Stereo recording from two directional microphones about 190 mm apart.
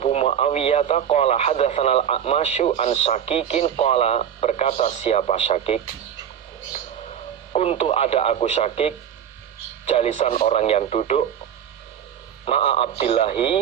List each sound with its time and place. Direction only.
0.0 s speech: 35° left (ahead or behind)
7.5 s speech: 35° left (ahead or behind)
9.9 s speech: 35° left (ahead or behind)
12.5 s speech: 30° left (ahead or behind)